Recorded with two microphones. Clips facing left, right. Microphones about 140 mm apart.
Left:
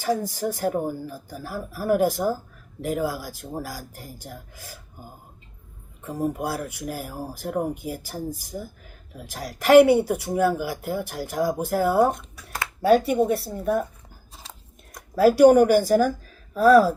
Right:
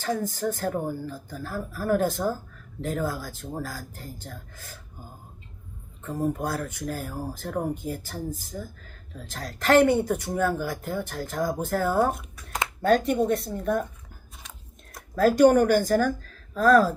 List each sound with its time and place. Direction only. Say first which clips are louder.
0.0 s speech: left 2 dB; 10° left (ahead or behind)
6.0 s speech: left 1 dB; 10° left (ahead or behind)
14.4 s a sound: left 3 dB; 30° left (ahead or behind)
15.1 s speech: left 3 dB; 10° left (ahead or behind)